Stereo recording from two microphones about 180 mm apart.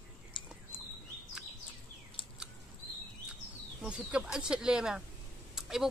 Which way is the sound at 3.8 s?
5° right (ahead or behind).